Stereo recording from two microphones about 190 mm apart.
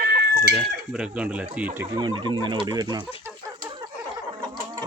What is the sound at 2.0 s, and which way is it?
Speech, 25° right (ahead or behind).